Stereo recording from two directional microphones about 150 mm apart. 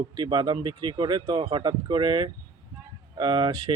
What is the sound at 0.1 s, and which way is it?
Speech, 30° right (ahead or behind).